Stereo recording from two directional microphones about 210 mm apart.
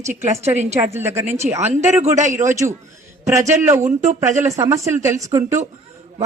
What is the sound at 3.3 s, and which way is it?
Speech, 15° right (ahead or behind).